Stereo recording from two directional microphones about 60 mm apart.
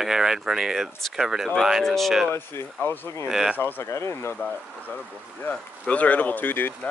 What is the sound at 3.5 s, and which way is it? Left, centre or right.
Speech, left.